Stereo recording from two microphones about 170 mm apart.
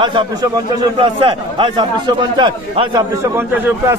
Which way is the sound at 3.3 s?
15° right (ahead or behind).